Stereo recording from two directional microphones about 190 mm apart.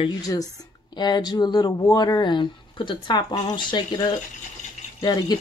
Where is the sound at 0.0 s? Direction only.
20° left (ahead or behind).